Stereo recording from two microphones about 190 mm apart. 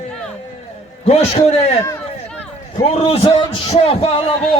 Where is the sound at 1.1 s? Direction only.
35° left (ahead or behind).